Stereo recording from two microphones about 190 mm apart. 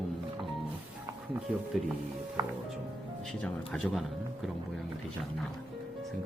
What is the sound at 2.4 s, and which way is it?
Music, 15° right (ahead or behind).